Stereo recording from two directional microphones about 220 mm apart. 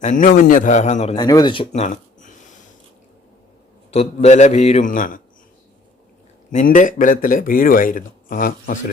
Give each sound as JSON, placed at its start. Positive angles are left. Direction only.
{"t": 0.0, "sound": "speech", "side_deg": 35}
{"t": 1.1, "sound": "speech", "side_deg": 20}
{"t": 3.9, "sound": "speech", "side_deg": 30}
{"t": 6.5, "sound": "speech", "side_deg": 35}